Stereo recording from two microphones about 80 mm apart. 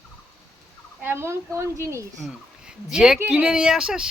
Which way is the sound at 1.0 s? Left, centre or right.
Right.